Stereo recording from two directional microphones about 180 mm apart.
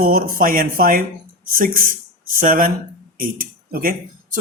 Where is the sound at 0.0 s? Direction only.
50° right (ahead or behind).